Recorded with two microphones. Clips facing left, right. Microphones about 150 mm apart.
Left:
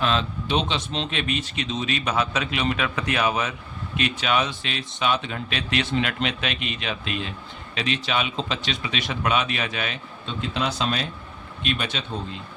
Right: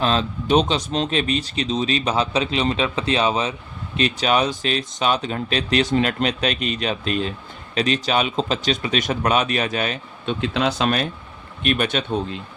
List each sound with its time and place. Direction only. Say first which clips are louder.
0.0 s speech: right 3 dB; 40° right (ahead or behind)
10.2 s speech: right 6 dB; 70° right (ahead or behind)